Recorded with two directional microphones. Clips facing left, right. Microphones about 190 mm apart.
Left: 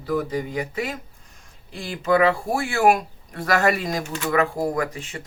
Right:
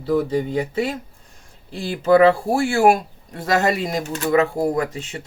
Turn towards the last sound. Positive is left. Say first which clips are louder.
# right 3 dB
turn(degrees=-25)  # may be behind; listen again after turning